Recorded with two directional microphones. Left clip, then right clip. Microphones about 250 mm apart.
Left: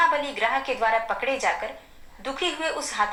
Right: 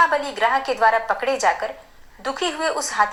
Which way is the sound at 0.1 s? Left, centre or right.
Right.